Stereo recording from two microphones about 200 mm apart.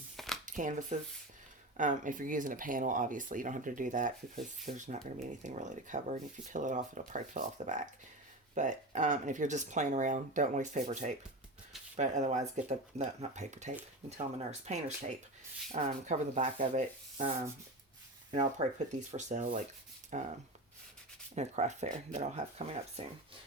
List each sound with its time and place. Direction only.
0.4 s speech: 40° right (ahead or behind)
18.9 s speech: 35° right (ahead or behind)
21.3 s speech: 35° right (ahead or behind)